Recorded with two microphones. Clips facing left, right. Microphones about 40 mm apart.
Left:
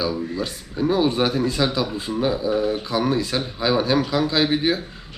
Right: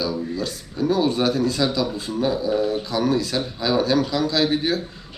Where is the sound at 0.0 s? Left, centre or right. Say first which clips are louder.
Left 1 dB; left.